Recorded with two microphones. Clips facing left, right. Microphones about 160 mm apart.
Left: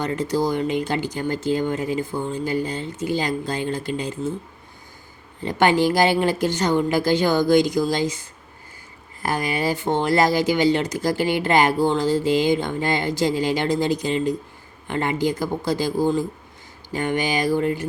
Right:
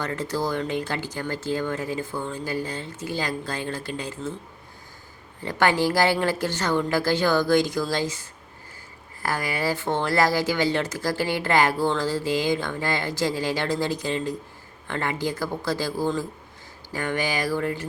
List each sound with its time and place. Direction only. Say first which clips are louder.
0.0 s speech: left 5 dB; 15° left (ahead or behind)
5.4 s speech: left 4 dB; 20° left (ahead or behind)